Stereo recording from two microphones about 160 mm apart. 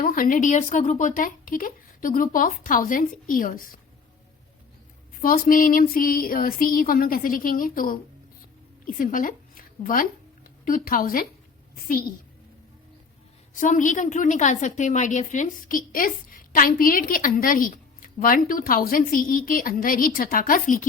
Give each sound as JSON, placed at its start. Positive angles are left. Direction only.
{"t": 0.0, "sound": "a woman's voice", "side_deg": 60}
{"t": 5.2, "sound": "a woman's voice", "side_deg": 60}
{"t": 13.6, "sound": "a woman's voice", "side_deg": 50}